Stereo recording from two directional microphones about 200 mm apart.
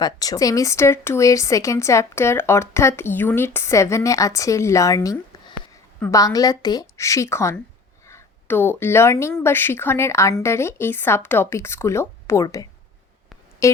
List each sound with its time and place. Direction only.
0.0 s speech: 20° left (ahead or behind)
13.6 s music: 15° left (ahead or behind)